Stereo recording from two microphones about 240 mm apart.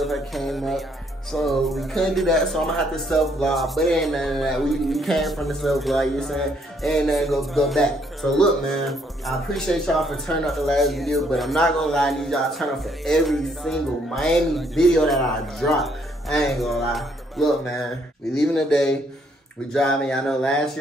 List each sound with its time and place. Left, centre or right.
0.0 s speech: centre